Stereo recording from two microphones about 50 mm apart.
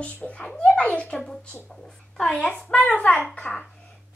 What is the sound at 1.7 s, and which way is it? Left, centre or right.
Speech, centre.